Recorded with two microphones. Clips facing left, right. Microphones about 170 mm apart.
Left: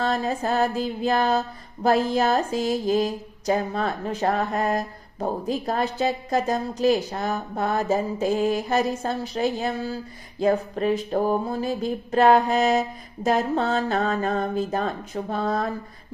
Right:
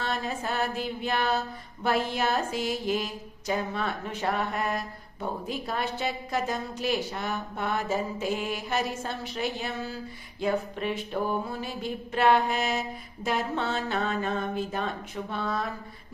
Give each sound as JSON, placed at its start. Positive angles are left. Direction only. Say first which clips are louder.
{"t": 0.0, "sound": "mantra", "louder": "left 7 dB", "side_deg": 35}